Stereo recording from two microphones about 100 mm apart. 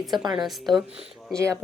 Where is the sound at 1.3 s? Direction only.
30° right (ahead or behind).